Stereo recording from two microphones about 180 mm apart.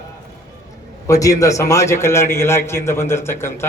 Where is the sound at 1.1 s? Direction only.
20° left (ahead or behind).